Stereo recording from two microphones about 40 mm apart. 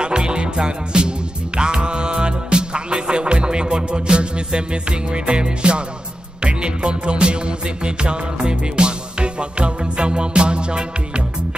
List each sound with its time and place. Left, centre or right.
0.0 s music: right